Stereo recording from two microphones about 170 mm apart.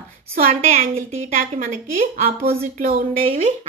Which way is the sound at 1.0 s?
50° right (ahead or behind).